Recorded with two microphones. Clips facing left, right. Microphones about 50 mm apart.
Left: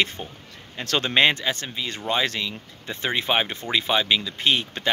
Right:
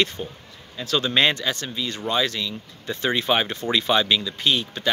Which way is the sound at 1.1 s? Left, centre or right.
Left.